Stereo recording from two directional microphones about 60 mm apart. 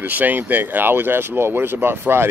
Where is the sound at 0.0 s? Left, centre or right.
Right.